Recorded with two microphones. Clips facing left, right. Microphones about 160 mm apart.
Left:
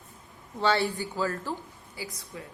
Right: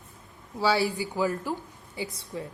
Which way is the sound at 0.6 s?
5° right (ahead or behind).